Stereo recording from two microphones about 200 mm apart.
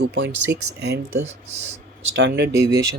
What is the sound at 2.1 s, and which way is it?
Speech, 60° right (ahead or behind).